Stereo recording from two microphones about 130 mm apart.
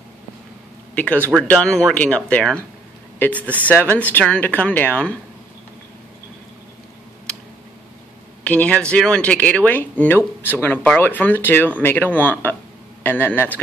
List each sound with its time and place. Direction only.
0.9 s speech: 10° left (ahead or behind)
8.5 s speech: 10° left (ahead or behind)